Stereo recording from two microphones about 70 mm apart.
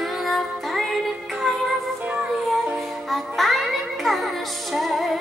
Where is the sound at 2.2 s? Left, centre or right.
Centre.